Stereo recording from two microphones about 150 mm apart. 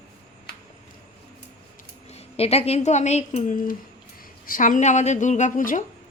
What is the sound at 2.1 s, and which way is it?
A woman's voice, 45° left (ahead or behind).